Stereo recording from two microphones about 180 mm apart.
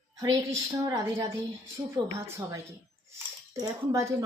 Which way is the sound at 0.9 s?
15° right (ahead or behind).